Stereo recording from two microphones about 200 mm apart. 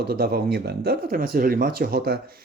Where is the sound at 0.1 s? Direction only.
50° right (ahead or behind).